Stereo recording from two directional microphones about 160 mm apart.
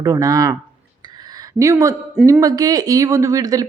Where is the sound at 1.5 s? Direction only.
20° right (ahead or behind).